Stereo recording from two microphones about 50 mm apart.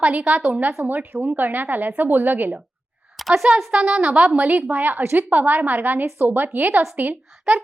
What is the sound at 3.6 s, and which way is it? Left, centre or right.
Speech, centre.